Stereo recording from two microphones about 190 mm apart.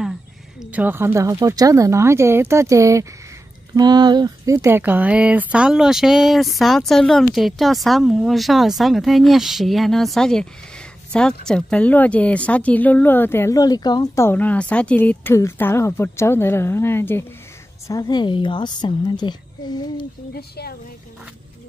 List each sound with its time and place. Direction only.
0.6 s a woman's voice: 10° right (ahead or behind); by 20.1 s 25° left (ahead or behind)
20.3 s a woman's voice: 55° left (ahead or behind)